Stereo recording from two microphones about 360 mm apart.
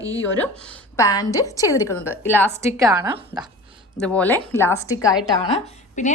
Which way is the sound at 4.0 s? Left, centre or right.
Centre.